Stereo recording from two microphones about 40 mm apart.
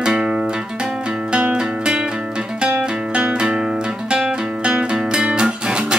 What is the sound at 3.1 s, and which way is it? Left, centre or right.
Music, right.